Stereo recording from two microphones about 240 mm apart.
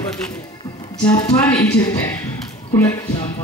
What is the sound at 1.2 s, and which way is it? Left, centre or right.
Speech, centre.